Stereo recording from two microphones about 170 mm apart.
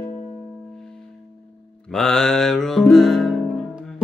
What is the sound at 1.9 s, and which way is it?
Music, 5° left (ahead or behind).